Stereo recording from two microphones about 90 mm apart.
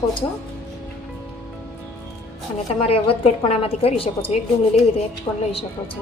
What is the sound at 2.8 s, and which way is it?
A woman's voice, 90° left.